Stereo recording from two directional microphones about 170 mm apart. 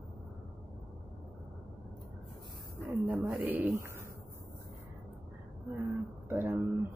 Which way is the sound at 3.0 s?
5° right (ahead or behind).